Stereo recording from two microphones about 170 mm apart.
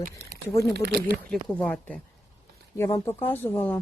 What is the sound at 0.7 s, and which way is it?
Speech, 75° right (ahead or behind).